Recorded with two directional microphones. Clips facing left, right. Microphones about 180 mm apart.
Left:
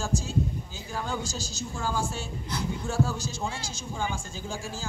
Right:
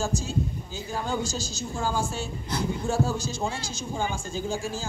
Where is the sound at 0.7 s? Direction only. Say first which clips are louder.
Right 3 dB; 25° right (ahead or behind).